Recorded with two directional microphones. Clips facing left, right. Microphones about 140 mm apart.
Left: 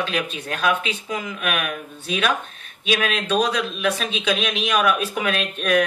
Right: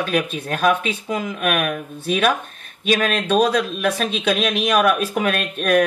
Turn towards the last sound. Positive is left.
turn(degrees=-50)  # may be behind; listen again after turning